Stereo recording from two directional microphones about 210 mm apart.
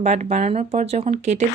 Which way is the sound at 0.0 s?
30° right (ahead or behind).